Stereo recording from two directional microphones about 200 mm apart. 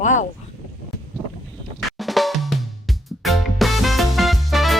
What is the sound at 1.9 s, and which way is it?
Music, centre (ahead or behind).